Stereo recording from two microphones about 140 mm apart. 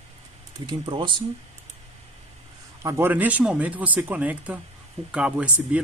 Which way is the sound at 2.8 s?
20° right (ahead or behind).